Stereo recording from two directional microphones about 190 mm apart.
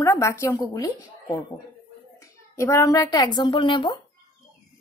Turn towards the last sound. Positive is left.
turn(degrees=25)  # may be behind; listen again after turning